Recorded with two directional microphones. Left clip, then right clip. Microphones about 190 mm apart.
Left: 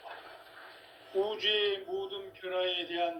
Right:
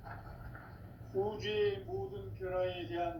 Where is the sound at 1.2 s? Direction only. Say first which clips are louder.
Left 5 dB; 45° left (ahead or behind).